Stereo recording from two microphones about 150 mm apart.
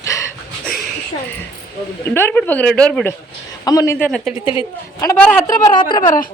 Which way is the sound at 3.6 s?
20° left (ahead or behind).